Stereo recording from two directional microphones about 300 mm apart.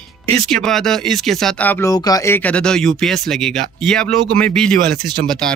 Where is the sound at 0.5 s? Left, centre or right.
Centre.